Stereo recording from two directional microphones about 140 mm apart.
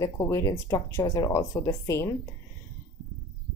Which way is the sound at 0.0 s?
25° left (ahead or behind).